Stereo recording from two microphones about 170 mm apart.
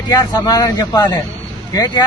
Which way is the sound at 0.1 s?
25° left (ahead or behind).